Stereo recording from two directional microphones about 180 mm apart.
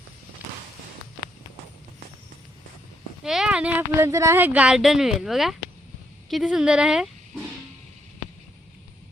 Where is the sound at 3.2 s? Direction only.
5° right (ahead or behind).